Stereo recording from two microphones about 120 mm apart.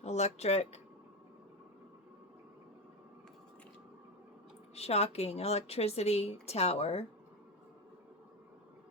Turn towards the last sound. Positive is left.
turn(degrees=55)  # may be behind; listen again after turning